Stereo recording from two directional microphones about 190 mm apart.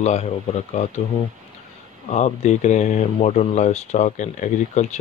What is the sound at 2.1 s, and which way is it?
Speech, 35° left (ahead or behind).